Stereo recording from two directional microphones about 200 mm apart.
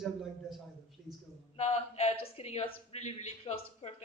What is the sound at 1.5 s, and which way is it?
Speech, 35° left (ahead or behind).